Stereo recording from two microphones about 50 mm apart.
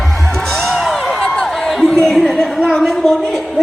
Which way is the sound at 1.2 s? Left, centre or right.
Centre.